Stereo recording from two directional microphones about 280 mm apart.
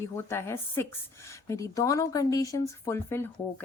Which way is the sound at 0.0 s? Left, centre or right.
Centre.